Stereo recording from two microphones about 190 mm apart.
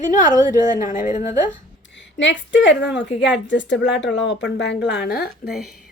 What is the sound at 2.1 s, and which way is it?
A woman's voice, 70° left (ahead or behind).